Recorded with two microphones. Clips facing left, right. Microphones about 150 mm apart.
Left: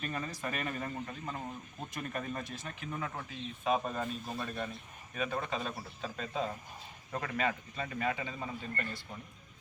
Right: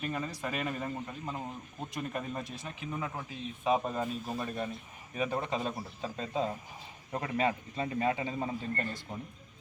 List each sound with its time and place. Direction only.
0.0 s a man's voice: 10° right (ahead or behind); by 9.0 s 35° right (ahead or behind)